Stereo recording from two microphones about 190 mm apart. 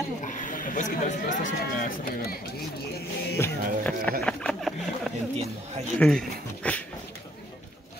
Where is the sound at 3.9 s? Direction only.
5° left (ahead or behind).